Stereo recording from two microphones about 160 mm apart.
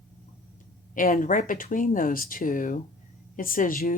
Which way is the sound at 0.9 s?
65° left (ahead or behind).